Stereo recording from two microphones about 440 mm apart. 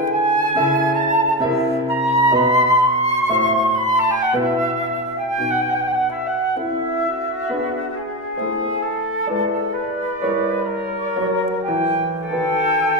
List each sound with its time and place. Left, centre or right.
0.3 s music: centre
2.1 s flute: centre